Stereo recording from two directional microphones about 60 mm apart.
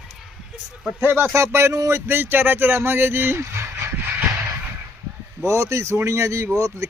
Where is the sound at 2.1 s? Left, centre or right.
Right.